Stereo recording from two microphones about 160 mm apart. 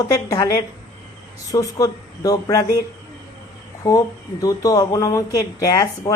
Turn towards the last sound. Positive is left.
turn(degrees=20)  # may be behind; listen again after turning